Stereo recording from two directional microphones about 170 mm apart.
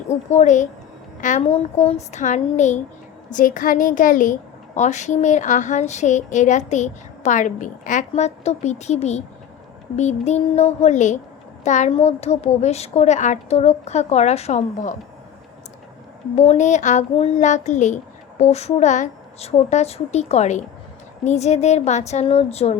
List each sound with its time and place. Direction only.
0.3 s a woman's voice: 45° left (ahead or behind)
16.3 s a woman's voice: 40° left (ahead or behind)